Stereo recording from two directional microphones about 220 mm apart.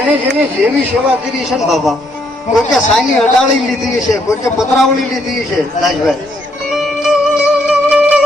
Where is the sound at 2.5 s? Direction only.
5° left (ahead or behind).